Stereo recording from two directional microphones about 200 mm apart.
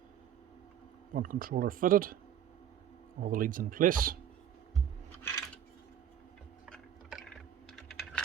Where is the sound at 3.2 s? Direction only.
45° right (ahead or behind).